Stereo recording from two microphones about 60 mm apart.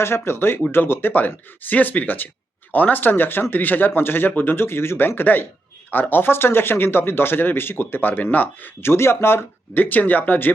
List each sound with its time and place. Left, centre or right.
0.0 s speech: left
8.8 s speech: left